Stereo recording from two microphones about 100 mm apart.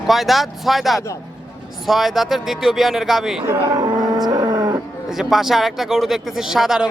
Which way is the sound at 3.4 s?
35° right (ahead or behind).